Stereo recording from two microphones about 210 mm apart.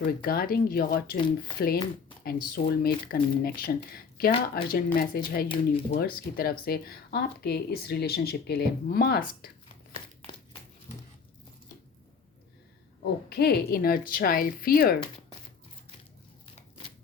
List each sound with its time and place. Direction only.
0.0 s speech: 45° left (ahead or behind)
13.3 s speech: 50° left (ahead or behind)